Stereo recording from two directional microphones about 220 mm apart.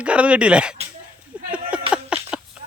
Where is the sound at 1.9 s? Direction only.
5° right (ahead or behind).